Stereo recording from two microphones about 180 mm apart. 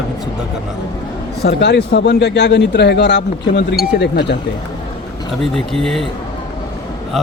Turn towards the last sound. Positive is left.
turn(degrees=0)  # may be behind; listen again after turning